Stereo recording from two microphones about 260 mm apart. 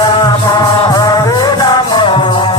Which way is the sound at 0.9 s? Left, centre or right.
Centre.